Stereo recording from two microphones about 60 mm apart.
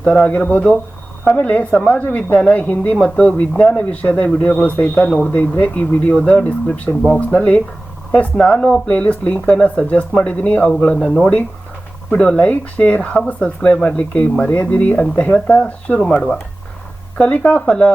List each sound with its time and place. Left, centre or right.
0.0 s speech: left